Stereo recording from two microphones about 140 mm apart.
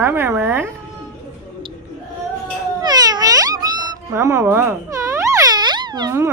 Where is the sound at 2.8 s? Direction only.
30° right (ahead or behind).